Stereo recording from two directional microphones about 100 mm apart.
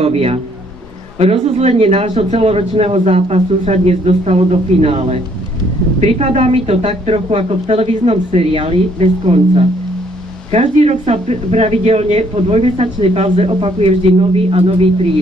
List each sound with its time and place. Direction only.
0.0 s a man's voice: 85° right
9.3 s a man's voice: 90° right
10.5 s speech: 90° right